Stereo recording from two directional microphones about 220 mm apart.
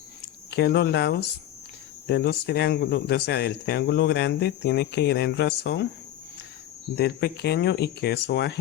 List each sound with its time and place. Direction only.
0.5 s speech: 50° left (ahead or behind)
6.9 s speech: 50° left (ahead or behind)